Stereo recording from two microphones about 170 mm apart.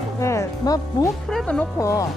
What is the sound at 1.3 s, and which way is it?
Speech, 5° left (ahead or behind).